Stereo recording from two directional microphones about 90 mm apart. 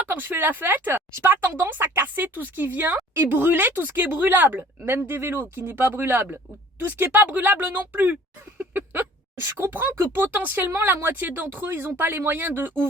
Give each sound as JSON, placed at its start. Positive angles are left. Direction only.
{"t": 0.1, "sound": "speech", "side_deg": -20}